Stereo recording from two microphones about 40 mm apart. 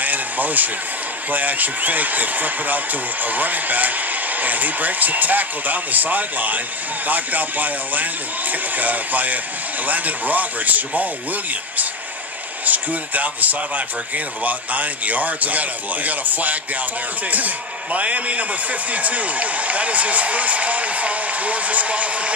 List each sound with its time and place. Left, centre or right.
0.0 s vehicle: right
1.3 s speech: right
12.6 s a man's voice: right
17.9 s a man's voice: right